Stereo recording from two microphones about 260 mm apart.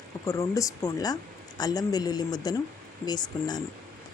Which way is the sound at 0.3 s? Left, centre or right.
Centre.